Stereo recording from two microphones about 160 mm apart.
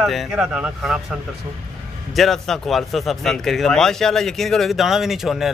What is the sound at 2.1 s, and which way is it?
A man's voice, centre (ahead or behind).